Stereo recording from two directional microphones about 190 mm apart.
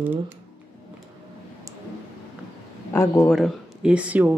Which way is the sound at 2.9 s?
15° left (ahead or behind).